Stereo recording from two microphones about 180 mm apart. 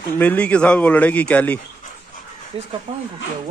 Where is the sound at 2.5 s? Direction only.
35° right (ahead or behind).